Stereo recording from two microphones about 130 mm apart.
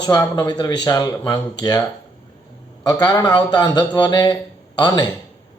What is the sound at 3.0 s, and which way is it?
Speech, 30° left (ahead or behind).